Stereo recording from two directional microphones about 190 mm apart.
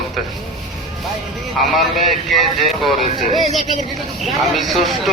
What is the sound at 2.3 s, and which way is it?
Speech, centre (ahead or behind).